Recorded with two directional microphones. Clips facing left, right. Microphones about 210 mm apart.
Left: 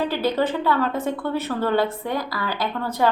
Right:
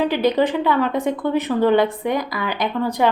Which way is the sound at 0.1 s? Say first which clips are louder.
Right 4 dB; 15° right (ahead or behind).